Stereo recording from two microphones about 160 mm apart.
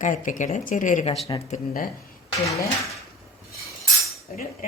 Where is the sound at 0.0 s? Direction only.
50° left (ahead or behind).